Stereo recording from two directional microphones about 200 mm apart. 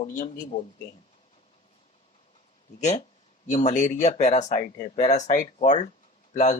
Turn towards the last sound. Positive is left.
turn(degrees=35)  # may be behind; listen again after turning